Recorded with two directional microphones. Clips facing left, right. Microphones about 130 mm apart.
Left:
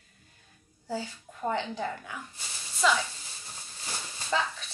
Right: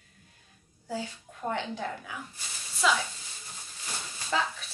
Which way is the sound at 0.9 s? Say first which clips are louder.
Left 1 dB; centre (ahead or behind).